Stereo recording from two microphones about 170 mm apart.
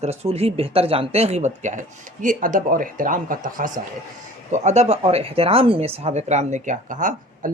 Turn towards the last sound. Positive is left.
turn(degrees=-50)  # may be behind; listen again after turning